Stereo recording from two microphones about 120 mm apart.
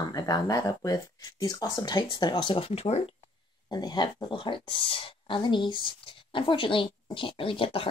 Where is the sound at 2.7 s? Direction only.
60° left (ahead or behind).